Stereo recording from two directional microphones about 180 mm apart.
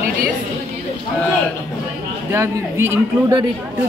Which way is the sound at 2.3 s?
15° right (ahead or behind).